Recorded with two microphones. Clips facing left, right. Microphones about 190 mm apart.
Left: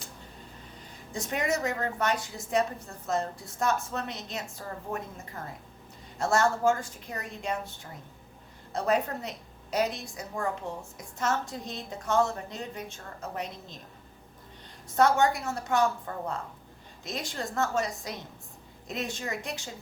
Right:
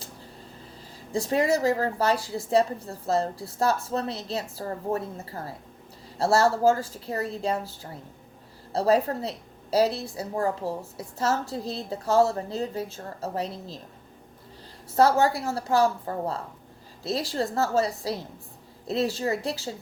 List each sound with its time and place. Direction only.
1.1 s a woman's voice: 30° right (ahead or behind)
14.8 s a woman's voice: 30° right (ahead or behind)